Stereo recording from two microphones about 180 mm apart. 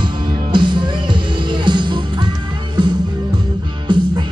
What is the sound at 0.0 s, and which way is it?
Music, 25° right (ahead or behind).